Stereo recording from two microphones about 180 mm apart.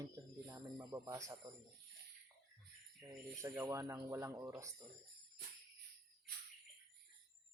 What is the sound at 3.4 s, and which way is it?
Speech, 15° right (ahead or behind).